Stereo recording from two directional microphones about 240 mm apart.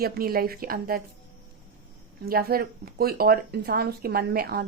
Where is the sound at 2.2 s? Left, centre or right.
Right.